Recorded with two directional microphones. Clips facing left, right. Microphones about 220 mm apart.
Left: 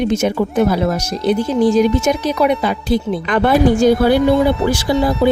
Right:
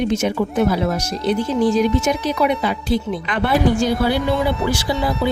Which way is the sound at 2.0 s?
45° left (ahead or behind).